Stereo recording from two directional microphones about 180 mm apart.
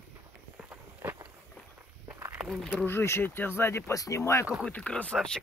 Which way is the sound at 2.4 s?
Centre (ahead or behind).